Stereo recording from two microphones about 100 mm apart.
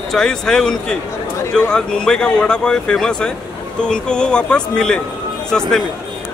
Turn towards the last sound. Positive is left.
turn(degrees=5)  # may be behind; listen again after turning